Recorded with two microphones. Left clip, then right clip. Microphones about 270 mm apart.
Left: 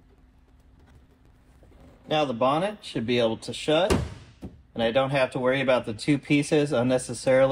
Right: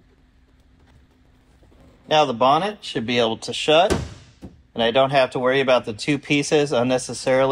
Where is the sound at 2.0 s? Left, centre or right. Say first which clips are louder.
Right 7 dB; right.